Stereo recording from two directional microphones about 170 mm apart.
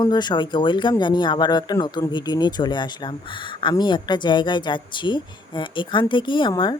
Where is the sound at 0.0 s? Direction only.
25° left (ahead or behind).